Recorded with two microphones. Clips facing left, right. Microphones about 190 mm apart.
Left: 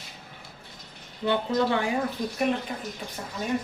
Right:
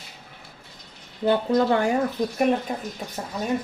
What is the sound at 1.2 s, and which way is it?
Speech, 40° right (ahead or behind).